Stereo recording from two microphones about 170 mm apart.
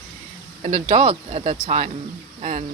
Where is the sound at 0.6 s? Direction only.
40° right (ahead or behind).